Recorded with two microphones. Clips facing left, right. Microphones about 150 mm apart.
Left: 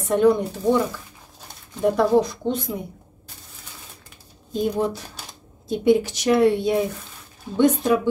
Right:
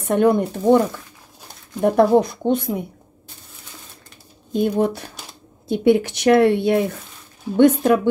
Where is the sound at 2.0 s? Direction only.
55° right (ahead or behind).